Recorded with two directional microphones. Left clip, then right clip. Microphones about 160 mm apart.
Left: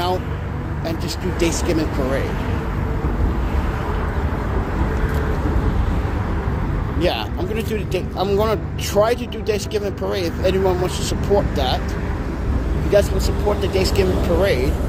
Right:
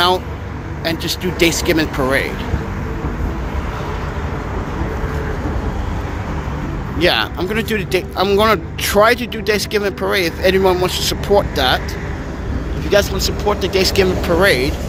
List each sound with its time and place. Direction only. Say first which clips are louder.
0.9 s speech: right 6 dB; 50° right (ahead or behind)
7.0 s speech: right 7 dB; 50° right (ahead or behind)
12.9 s speech: right 2 dB; 40° right (ahead or behind)